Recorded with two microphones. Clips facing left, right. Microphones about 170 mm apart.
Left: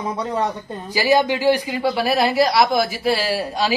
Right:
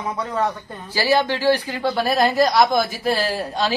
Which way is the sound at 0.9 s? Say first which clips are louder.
Left 2 dB; 15° left (ahead or behind).